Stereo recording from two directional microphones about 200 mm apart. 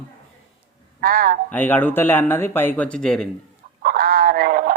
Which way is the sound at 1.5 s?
10° left (ahead or behind).